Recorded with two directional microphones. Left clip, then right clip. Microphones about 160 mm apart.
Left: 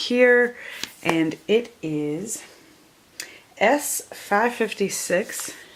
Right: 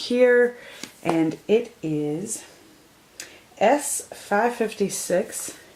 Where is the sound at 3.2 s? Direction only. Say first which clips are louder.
Even; 25° left (ahead or behind).